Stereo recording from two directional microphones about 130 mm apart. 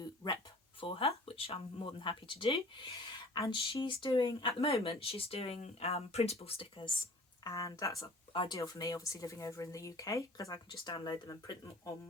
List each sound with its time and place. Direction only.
0.0 s a sound: 30° left (ahead or behind)
0.8 s speech: 40° left (ahead or behind)
7.4 s speech: 25° left (ahead or behind)